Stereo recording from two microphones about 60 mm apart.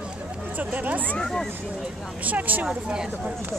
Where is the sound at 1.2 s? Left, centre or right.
Centre.